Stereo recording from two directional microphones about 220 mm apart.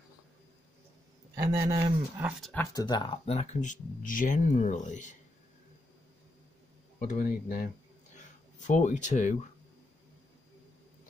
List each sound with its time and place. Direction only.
1.3 s speech: 15° right (ahead or behind)
2.5 s speech: 15° left (ahead or behind); by 5.1 s 35° left (ahead or behind)
7.0 s speech: 35° left (ahead or behind)